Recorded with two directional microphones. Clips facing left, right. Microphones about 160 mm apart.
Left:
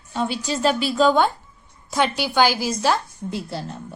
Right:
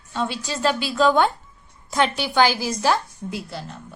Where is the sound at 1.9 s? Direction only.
15° left (ahead or behind).